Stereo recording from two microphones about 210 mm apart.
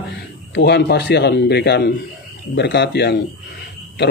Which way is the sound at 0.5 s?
55° left (ahead or behind).